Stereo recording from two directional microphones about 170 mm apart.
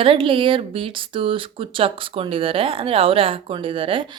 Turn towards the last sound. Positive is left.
turn(degrees=-30)  # may be behind; listen again after turning